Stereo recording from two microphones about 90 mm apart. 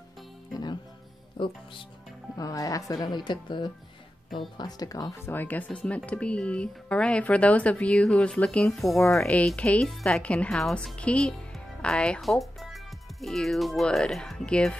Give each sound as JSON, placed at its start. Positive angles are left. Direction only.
{"t": 1.4, "sound": "speech", "side_deg": 65}
{"t": 2.3, "sound": "speech", "side_deg": 40}
{"t": 4.3, "sound": "speech", "side_deg": 75}
{"t": 4.6, "sound": "speech", "side_deg": 45}
{"t": 5.2, "sound": "a woman's voice", "side_deg": 20}